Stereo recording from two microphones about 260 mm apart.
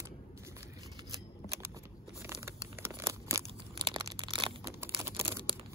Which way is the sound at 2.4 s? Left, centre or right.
Centre.